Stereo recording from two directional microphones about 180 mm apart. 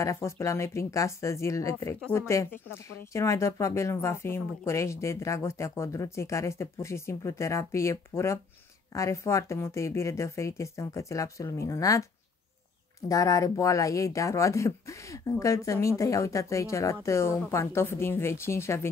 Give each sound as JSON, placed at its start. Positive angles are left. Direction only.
{"t": 0.0, "sound": "speech", "side_deg": 15}
{"t": 13.1, "sound": "speech", "side_deg": 20}